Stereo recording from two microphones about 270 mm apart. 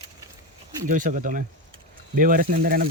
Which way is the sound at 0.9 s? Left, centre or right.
Right.